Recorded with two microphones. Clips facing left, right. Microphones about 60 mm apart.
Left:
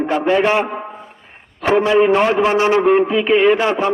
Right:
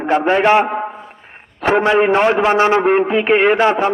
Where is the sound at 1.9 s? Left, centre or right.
Right.